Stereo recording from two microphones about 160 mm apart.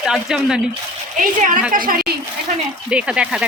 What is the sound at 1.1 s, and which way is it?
Speech, 55° right (ahead or behind).